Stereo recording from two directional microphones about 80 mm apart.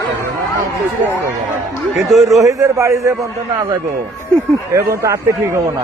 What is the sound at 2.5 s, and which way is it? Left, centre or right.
Speech, right.